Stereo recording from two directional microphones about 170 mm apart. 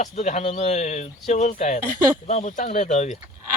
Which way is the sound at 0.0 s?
45° left (ahead or behind).